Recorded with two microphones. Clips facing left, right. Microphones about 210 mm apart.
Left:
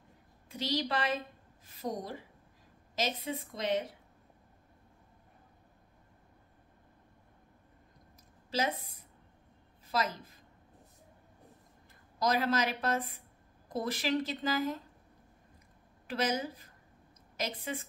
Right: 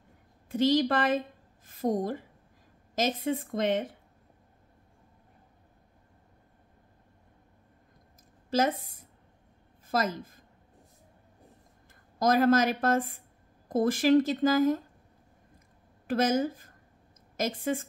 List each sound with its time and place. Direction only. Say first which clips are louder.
0.5 s a woman's voice: right 10 dB; 50° right (ahead or behind)
8.5 s a woman's voice: right 7 dB; 50° right (ahead or behind)
12.2 s speech: right 7 dB; 50° right (ahead or behind)
16.1 s speech: right 7 dB; 50° right (ahead or behind)